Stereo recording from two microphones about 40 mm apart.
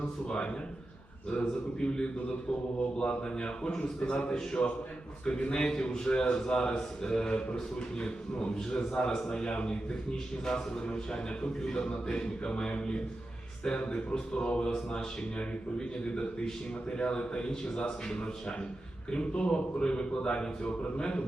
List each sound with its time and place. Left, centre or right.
0.3 s a man's voice: left
16.9 s a man's voice: left